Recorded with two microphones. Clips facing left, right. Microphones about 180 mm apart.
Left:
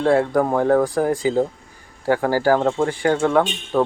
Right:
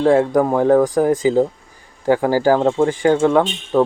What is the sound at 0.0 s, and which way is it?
Speech, 20° right (ahead or behind).